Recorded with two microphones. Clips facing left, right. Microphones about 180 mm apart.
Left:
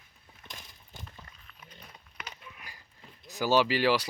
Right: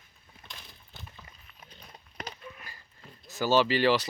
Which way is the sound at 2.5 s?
15° left (ahead or behind).